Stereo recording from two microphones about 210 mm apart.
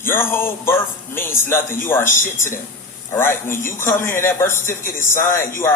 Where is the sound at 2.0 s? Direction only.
40° left (ahead or behind).